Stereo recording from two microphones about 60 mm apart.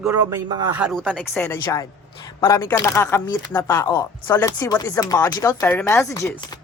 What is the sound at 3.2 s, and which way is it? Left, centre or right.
Speech, left.